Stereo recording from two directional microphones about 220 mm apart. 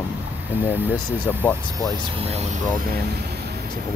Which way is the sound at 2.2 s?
30° right (ahead or behind).